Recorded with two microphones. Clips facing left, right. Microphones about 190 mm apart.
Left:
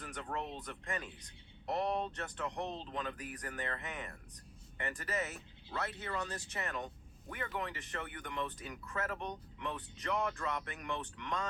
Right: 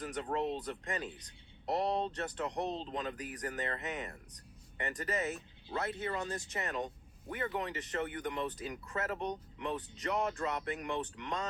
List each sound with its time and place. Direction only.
0.0 s speech: 30° right (ahead or behind)
2.5 s speech: 15° right (ahead or behind)